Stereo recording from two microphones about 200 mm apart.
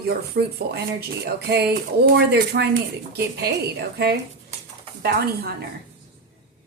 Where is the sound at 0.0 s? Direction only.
55° right (ahead or behind).